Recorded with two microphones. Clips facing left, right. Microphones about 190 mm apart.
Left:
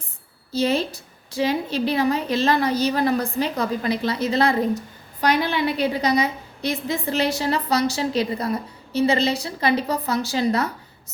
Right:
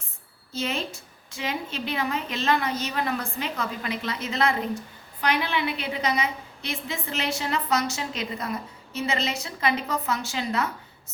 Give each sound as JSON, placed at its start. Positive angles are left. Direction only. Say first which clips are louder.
{"t": 0.5, "sound": "a woman's voice", "louder": "left 8 dB", "side_deg": 35}